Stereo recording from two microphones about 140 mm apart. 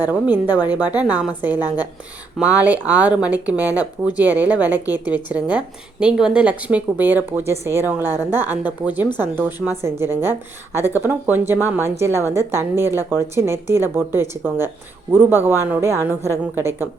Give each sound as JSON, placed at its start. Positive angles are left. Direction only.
{"t": 0.0, "sound": "a woman's voice", "side_deg": -15}